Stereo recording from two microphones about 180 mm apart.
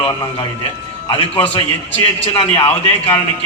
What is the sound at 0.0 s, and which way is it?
A man's voice, 20° left (ahead or behind).